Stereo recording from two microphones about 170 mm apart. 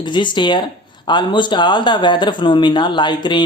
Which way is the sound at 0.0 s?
25° left (ahead or behind).